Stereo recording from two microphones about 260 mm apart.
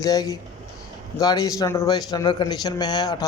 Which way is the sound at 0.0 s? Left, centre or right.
Centre.